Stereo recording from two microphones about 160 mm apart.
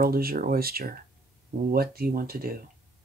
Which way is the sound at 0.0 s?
65° right (ahead or behind).